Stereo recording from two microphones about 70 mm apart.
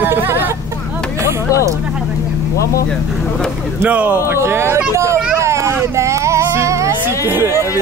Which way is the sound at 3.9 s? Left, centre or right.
Right.